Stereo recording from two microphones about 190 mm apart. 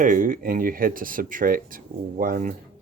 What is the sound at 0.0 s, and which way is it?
Speech, 45° right (ahead or behind).